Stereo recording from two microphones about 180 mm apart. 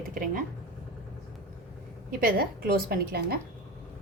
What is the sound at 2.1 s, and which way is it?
A woman's voice, 55° right (ahead or behind).